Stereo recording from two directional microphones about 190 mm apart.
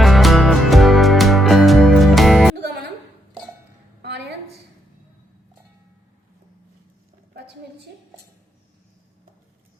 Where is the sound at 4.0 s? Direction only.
60° right (ahead or behind).